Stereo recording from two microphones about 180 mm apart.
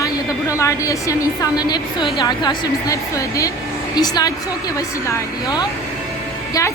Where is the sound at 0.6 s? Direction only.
15° left (ahead or behind).